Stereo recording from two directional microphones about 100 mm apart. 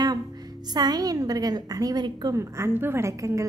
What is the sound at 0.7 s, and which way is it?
A woman's voice, 45° right (ahead or behind).